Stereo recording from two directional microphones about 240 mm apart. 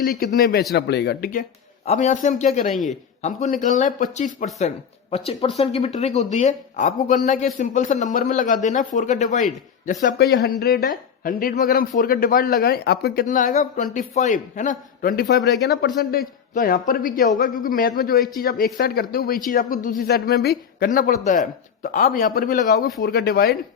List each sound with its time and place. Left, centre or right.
0.0 s speech: left